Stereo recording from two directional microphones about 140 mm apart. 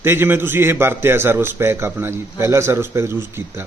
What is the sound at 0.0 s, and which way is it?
A man's voice, 15° right (ahead or behind).